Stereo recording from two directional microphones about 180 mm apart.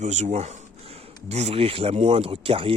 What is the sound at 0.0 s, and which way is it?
Speech, 40° right (ahead or behind).